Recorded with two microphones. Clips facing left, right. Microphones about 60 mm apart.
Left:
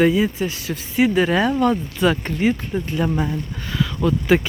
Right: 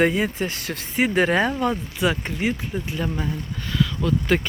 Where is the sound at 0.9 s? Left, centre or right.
Right.